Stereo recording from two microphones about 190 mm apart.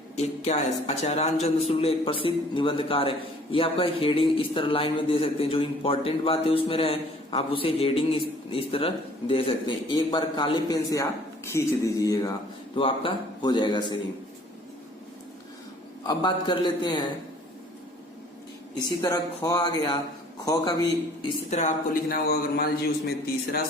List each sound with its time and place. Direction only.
0.2 s a man's voice: 35° left (ahead or behind)
16.0 s a man's voice: 25° left (ahead or behind)
18.9 s a man's voice: 20° left (ahead or behind)
21.2 s a man's voice: 35° left (ahead or behind)
22.1 s a man's voice: 55° left (ahead or behind)